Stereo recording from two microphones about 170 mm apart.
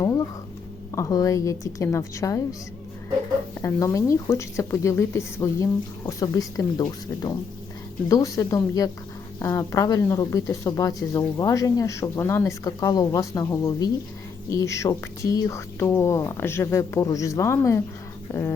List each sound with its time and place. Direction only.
0.0 s a sound: 20° left (ahead or behind)
0.9 s speech: 20° left (ahead or behind)
3.6 s speech: 20° left (ahead or behind)